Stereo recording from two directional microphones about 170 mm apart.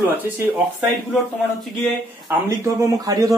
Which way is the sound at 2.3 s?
20° right (ahead or behind).